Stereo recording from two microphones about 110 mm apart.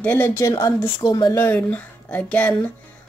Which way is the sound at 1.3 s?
20° left (ahead or behind).